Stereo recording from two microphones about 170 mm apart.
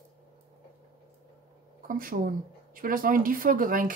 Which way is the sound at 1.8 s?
55° right (ahead or behind).